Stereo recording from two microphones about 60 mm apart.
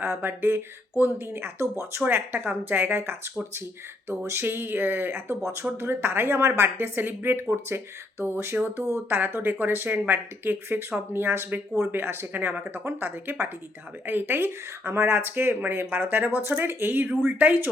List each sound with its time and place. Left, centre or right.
0.0 s speech: right
4.1 s speech: right
5.4 s speech: right
5.7 s speech: right
8.2 s a sound: right
9.0 s speech: right